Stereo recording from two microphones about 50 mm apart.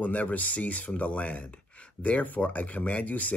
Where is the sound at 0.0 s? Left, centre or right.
Left.